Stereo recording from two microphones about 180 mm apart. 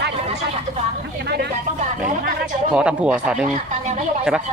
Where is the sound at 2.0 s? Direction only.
45° right (ahead or behind).